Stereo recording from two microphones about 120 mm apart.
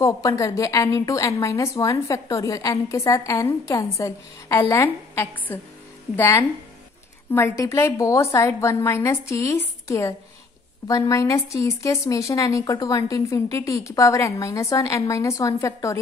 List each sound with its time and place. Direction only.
0.0 s a woman's voice: 25° left (ahead or behind)